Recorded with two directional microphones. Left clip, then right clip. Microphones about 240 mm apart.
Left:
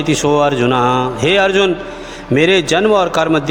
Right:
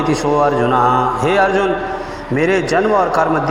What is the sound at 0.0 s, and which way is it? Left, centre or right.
A man's voice, left.